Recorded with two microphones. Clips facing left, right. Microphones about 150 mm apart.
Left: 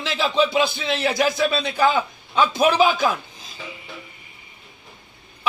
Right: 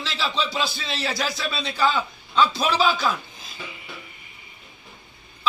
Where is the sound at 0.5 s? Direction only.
20° left (ahead or behind).